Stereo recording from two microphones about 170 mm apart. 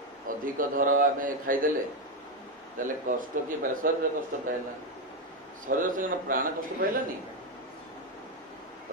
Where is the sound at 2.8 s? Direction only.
55° right (ahead or behind).